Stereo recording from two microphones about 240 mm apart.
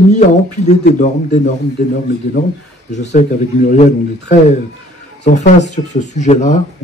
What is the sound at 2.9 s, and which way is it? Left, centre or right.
Speech, left.